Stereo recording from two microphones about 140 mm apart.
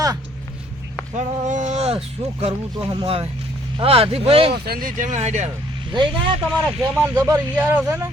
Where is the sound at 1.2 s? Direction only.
60° right (ahead or behind); by 4.6 s 40° right (ahead or behind).